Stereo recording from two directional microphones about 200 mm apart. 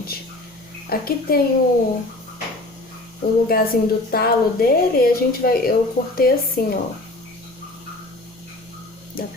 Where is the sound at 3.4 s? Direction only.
50° left (ahead or behind).